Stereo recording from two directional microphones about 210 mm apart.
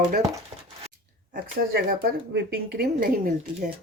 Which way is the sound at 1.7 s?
45° right (ahead or behind).